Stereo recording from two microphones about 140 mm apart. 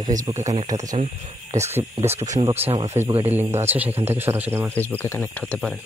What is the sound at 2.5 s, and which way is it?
Speech, 45° right (ahead or behind).